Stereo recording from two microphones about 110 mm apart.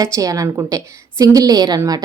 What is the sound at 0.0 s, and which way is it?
A woman's voice, 30° right (ahead or behind).